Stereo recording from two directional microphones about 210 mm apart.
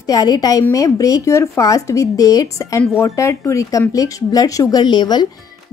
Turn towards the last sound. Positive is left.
turn(degrees=20)  # may be behind; listen again after turning